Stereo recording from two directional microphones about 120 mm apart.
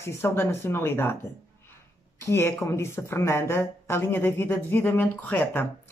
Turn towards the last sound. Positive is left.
turn(degrees=15)  # may be behind; listen again after turning